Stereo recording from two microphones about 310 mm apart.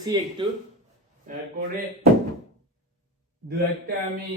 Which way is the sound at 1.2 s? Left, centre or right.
Right.